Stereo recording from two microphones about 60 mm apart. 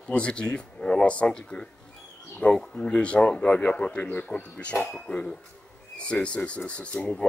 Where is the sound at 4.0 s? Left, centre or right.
Left; by 7.2 s centre.